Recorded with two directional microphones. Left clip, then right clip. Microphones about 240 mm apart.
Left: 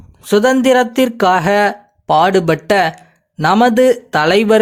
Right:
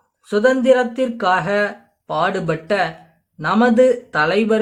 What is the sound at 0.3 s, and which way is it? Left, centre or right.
Speech, left.